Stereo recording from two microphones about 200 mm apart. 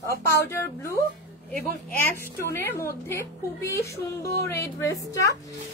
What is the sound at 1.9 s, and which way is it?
Speech, 50° left (ahead or behind).